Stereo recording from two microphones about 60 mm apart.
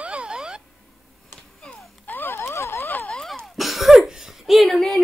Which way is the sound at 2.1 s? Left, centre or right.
Left.